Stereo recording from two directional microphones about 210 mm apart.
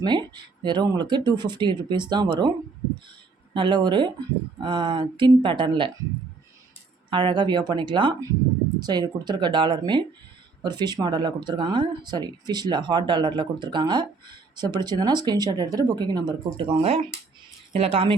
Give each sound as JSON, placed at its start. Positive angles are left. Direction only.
{"t": 0.0, "sound": "speech", "side_deg": -20}
{"t": 3.5, "sound": "speech", "side_deg": -20}
{"t": 7.1, "sound": "speech", "side_deg": -20}